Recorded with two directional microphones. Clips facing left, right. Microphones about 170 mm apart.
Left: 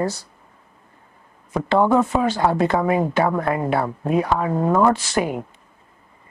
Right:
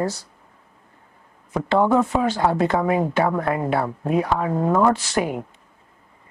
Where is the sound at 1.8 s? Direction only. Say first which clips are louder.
Left 1 dB; 25° left (ahead or behind).